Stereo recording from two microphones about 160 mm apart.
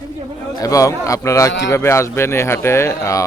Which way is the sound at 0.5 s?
20° left (ahead or behind).